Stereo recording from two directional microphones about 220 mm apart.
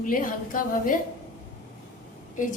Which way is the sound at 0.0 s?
40° left (ahead or behind).